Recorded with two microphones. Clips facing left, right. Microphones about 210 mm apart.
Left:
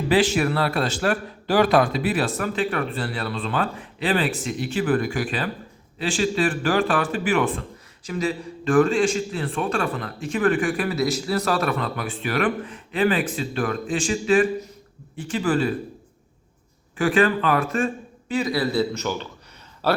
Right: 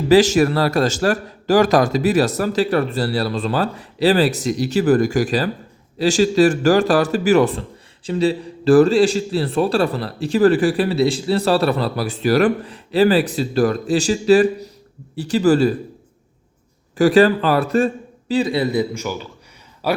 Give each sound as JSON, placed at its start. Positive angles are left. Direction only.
{"t": 0.1, "sound": "a man's voice", "side_deg": -40}
{"t": 17.0, "sound": "a man's voice", "side_deg": -35}